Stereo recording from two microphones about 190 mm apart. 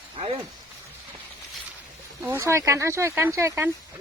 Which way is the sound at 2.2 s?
15° right (ahead or behind).